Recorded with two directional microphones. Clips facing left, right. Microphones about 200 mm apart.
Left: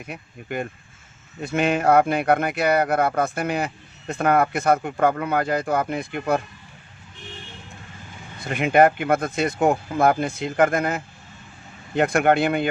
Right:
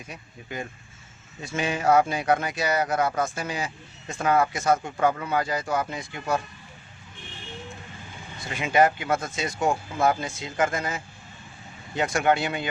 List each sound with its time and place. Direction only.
0.0 s speech: 60° left (ahead or behind)
8.4 s speech: 60° left (ahead or behind)